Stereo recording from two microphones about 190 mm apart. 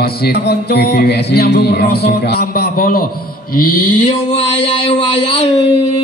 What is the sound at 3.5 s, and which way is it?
Mantra, 50° left (ahead or behind).